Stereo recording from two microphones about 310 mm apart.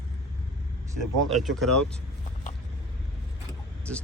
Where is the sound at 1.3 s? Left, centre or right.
Centre.